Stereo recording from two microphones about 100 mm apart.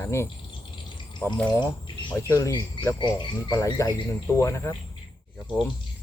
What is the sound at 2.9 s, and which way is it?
Speech, 50° left (ahead or behind).